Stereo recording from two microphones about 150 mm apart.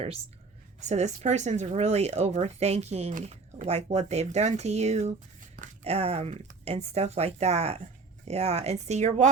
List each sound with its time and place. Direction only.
0.8 s speech: 50° right (ahead or behind)